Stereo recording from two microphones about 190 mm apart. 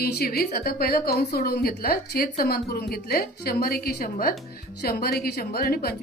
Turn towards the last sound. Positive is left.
turn(degrees=55)  # may be behind; listen again after turning